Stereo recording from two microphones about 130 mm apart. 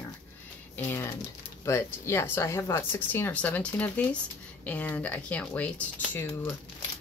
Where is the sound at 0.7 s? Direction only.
15° left (ahead or behind).